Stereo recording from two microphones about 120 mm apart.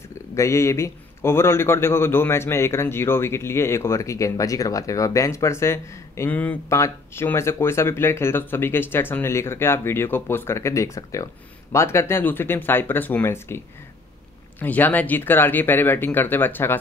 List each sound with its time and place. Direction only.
0.3 s a man's voice: 25° left (ahead or behind)
14.6 s speech: 15° left (ahead or behind)